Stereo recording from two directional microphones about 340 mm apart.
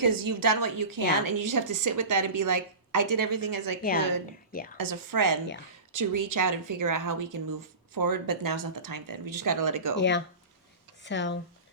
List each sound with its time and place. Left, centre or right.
0.0 s a woman's voice: right
4.3 s a woman's voice: left
4.8 s a woman's voice: right
5.9 s a woman's voice: right
10.0 s speech: left